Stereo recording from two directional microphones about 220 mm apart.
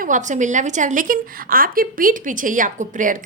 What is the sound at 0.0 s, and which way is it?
A woman's voice, 35° right (ahead or behind).